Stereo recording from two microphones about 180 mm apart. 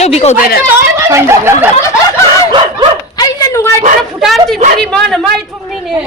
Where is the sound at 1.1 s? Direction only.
15° right (ahead or behind).